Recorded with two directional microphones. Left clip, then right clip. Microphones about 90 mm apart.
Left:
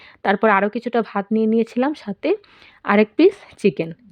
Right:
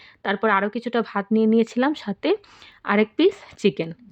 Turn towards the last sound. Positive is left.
turn(degrees=30)  # may be behind; listen again after turning